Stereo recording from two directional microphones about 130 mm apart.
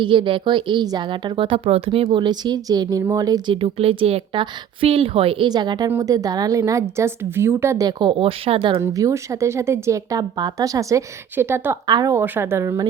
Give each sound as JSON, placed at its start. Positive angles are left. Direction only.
{"t": 0.0, "sound": "a woman's voice", "side_deg": -40}
{"t": 3.5, "sound": "a woman's voice", "side_deg": -45}
{"t": 5.5, "sound": "a woman's voice", "side_deg": -35}
{"t": 8.8, "sound": "speech", "side_deg": -25}
{"t": 11.9, "sound": "a woman's voice", "side_deg": -35}
{"t": 12.1, "sound": "speech", "side_deg": -15}